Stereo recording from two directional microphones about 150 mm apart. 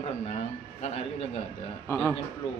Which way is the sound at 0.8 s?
45° left (ahead or behind).